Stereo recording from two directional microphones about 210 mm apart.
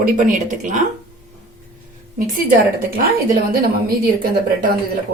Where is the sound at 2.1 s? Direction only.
40° right (ahead or behind).